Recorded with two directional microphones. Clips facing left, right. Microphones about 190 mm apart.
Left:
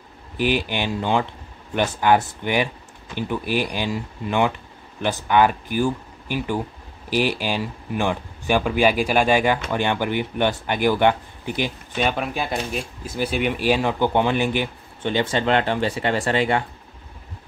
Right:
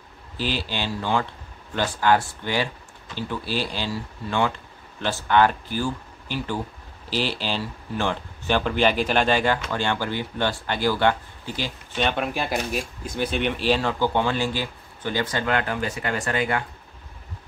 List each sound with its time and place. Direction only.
0.4 s speech: 15° left (ahead or behind)